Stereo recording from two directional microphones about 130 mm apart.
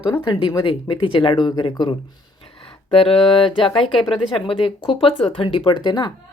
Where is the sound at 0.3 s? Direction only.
35° left (ahead or behind).